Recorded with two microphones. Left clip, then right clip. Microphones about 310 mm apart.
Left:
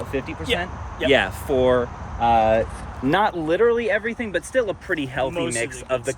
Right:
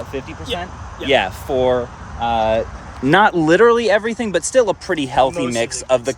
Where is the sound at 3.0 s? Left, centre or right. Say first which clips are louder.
Right 7 dB; right.